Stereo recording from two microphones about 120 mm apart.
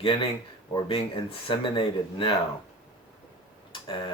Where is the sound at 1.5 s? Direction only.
45° left (ahead or behind).